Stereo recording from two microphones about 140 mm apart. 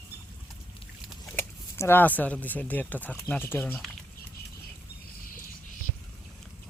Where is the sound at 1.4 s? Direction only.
15° left (ahead or behind).